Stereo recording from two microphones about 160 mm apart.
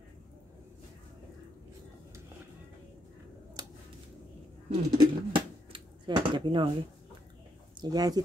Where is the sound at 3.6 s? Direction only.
25° right (ahead or behind).